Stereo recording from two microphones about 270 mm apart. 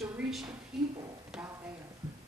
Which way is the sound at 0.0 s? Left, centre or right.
Centre.